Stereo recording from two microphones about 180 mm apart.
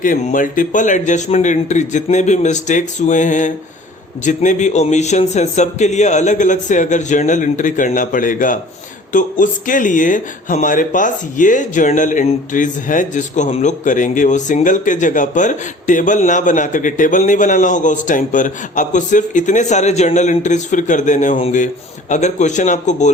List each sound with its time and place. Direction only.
0.0 s a man's voice: 50° left (ahead or behind)